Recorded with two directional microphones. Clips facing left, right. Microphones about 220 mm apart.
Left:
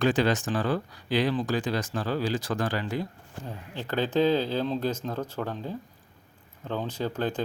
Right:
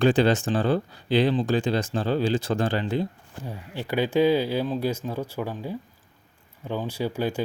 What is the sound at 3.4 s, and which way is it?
Speech, 10° right (ahead or behind).